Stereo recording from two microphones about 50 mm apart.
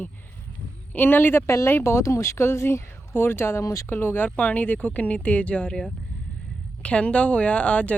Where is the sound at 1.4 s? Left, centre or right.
Left.